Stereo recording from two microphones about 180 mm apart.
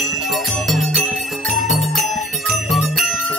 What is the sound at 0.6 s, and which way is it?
Jingle bell, centre (ahead or behind).